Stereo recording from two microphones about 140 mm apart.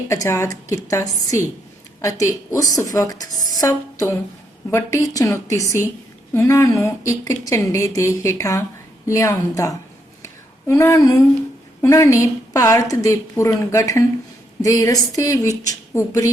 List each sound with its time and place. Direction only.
0.1 s a woman's voice: 20° left (ahead or behind)
10.2 s a sound: 20° left (ahead or behind)
11.8 s a woman's voice: 20° left (ahead or behind)